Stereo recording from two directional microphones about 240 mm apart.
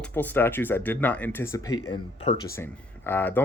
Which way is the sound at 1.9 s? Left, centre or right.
Left.